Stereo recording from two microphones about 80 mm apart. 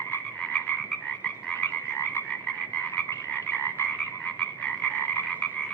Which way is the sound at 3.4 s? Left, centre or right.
Left.